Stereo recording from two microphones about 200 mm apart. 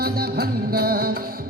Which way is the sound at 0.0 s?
50° right (ahead or behind).